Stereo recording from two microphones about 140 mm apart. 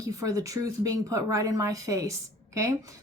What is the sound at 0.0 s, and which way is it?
A woman's voice, 25° right (ahead or behind).